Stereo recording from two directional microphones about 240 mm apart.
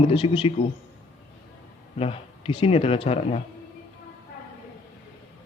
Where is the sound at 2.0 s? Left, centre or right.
Left.